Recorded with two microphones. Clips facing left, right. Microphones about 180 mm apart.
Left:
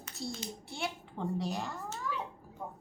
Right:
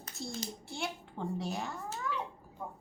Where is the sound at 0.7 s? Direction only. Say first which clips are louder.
Even; centre (ahead or behind).